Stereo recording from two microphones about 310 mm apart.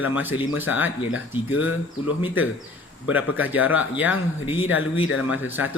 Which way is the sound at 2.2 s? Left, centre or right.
Centre.